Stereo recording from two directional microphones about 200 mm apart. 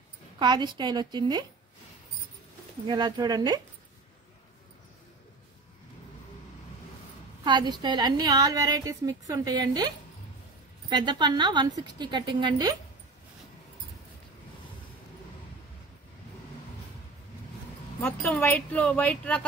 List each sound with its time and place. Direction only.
0.4 s a woman's voice: 20° right (ahead or behind)
2.9 s a woman's voice: 20° right (ahead or behind)
7.4 s a woman's voice: 20° right (ahead or behind)
18.0 s speech: 5° left (ahead or behind)